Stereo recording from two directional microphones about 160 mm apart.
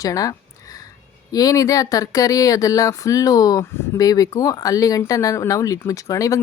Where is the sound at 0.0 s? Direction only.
20° left (ahead or behind).